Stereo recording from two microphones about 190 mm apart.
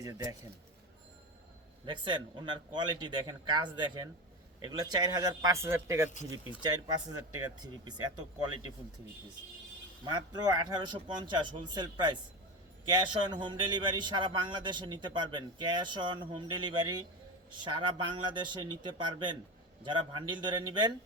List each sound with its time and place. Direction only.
1.8 s a man's voice: 25° right (ahead or behind)
10.0 s a man's voice: 20° right (ahead or behind)